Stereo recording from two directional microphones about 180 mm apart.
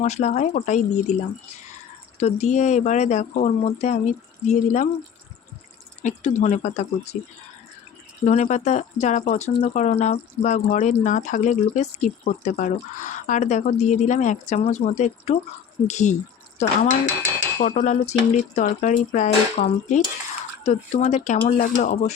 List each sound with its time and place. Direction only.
0.0 s speech: 40° left (ahead or behind)
2.1 s speech: 40° left (ahead or behind)
6.0 s speech: 40° left (ahead or behind)
8.2 s speech: 40° left (ahead or behind)